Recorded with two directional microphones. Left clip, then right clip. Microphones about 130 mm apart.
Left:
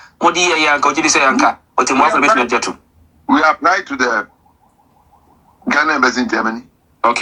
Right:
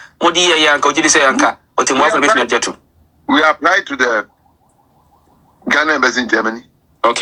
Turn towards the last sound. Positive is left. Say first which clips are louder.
# even
turn(degrees=-25)  # may be behind; listen again after turning